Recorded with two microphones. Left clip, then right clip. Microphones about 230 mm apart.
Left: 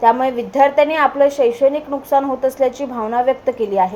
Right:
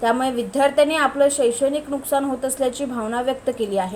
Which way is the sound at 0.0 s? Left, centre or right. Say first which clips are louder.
Left 6 dB; centre.